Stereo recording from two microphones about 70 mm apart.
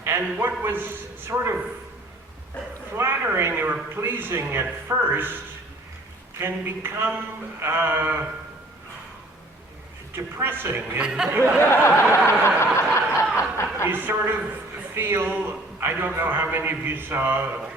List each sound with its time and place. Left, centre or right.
0.0 s a man's voice: right
2.9 s a man's voice: right
6.4 s a man's voice: right
10.1 s a man's voice: right
10.8 s speech: centre
11.6 s a sound: left
12.5 s snicker: left
13.3 s a sound: left
13.8 s a man's voice: right